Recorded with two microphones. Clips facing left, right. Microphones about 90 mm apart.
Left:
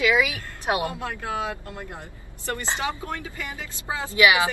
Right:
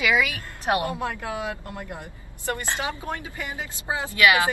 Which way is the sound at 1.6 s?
20° right (ahead or behind).